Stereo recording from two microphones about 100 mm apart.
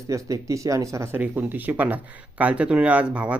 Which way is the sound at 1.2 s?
15° right (ahead or behind).